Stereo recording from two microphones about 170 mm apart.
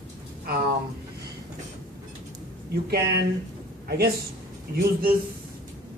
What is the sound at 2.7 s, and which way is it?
Speech, 65° right (ahead or behind).